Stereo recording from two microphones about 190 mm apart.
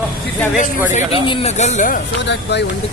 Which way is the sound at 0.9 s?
40° left (ahead or behind).